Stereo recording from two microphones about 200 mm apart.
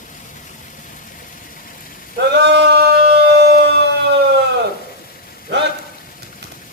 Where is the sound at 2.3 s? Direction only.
60° right (ahead or behind).